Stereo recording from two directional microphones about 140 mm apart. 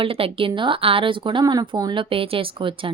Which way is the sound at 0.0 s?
40° right (ahead or behind).